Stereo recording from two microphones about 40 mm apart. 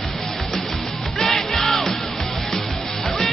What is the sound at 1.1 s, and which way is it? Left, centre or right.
Music, centre.